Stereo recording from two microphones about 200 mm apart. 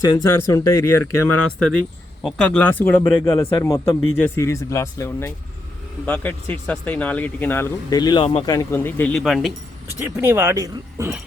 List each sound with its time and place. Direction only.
0.0 s speech: 15° left (ahead or behind); by 9.5 s centre (ahead or behind)
10.2 s speech: 10° right (ahead or behind)